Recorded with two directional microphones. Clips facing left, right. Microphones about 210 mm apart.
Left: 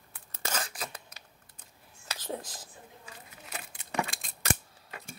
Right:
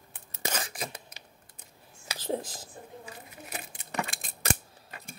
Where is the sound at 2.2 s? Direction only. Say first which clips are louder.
Right 6 dB; 25° right (ahead or behind).